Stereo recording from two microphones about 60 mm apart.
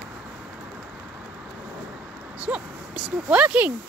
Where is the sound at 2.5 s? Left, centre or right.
Right.